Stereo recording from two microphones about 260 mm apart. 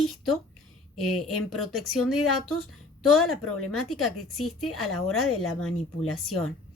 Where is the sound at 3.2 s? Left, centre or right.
Left.